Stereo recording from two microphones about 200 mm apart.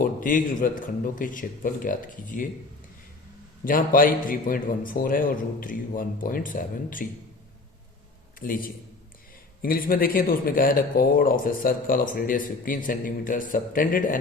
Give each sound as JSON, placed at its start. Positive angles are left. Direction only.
{"t": 0.0, "sound": "speech", "side_deg": 40}
{"t": 3.6, "sound": "speech", "side_deg": 45}
{"t": 8.4, "sound": "speech", "side_deg": 45}